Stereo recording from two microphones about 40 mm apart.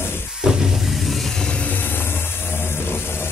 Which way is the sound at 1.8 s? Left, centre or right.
Left.